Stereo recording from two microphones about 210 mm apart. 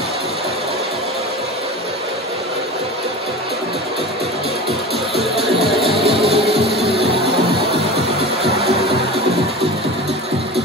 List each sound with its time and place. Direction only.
5.1 s music: centre (ahead or behind)
6.0 s music: 25° right (ahead or behind)